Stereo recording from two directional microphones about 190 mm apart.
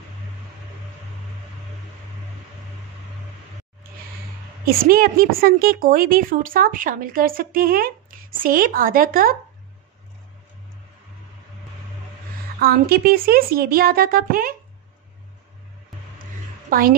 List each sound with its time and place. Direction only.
4.6 s a woman's voice: 50° right (ahead or behind)
12.5 s a woman's voice: 55° right (ahead or behind)
16.7 s a woman's voice: 50° right (ahead or behind)